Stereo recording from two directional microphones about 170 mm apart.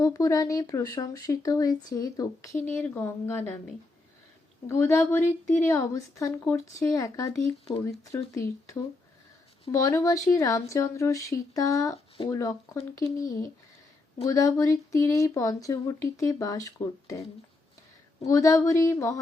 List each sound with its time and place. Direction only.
0.0 s speech: 20° left (ahead or behind)
4.6 s speech: 15° left (ahead or behind)